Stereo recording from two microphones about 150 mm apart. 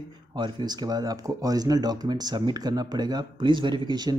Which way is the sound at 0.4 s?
30° right (ahead or behind).